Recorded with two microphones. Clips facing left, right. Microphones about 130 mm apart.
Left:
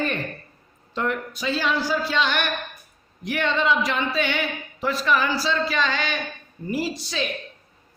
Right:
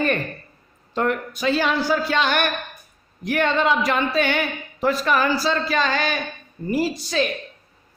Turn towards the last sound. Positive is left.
turn(degrees=-45)  # may be behind; listen again after turning